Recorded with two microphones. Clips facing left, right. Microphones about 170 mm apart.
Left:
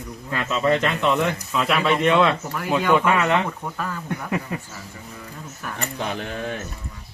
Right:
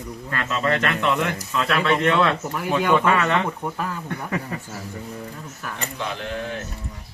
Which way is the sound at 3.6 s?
15° right (ahead or behind).